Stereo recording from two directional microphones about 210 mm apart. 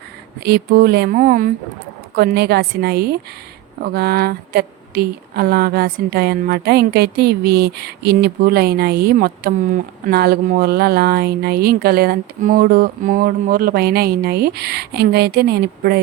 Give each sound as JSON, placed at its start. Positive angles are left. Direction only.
{"t": 0.3, "sound": "speech", "side_deg": -50}